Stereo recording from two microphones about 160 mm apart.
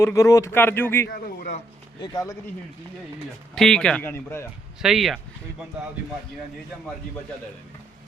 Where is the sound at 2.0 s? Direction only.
20° left (ahead or behind).